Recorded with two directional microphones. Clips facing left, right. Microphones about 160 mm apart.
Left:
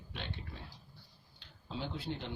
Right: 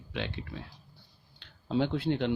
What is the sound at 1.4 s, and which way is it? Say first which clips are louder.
Speech: right 13 dB; 70° right (ahead or behind).